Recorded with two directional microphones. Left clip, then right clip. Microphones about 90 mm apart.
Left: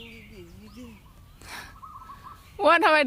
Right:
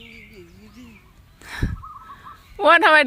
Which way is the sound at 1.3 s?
25° right (ahead or behind).